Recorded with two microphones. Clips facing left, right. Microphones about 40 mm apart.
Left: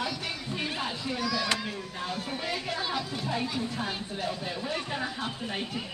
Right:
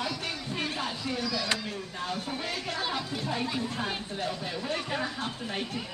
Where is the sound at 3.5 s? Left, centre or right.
Centre.